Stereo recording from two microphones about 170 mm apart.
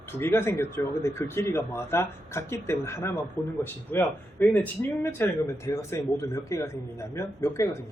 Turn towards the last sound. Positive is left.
turn(degrees=15)  # may be behind; listen again after turning